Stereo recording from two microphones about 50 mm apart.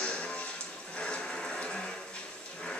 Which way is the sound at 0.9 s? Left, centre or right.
Left.